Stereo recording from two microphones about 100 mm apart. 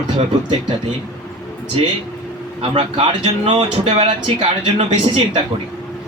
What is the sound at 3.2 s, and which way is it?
A man's voice, 85° right.